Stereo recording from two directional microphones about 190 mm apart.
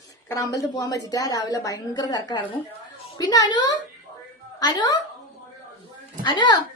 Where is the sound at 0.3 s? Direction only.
15° left (ahead or behind).